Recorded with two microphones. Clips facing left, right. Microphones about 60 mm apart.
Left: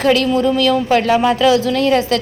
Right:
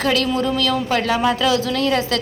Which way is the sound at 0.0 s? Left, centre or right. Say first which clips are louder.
Left 5 dB; left.